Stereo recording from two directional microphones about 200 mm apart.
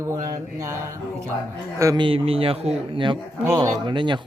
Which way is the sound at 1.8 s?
20° right (ahead or behind).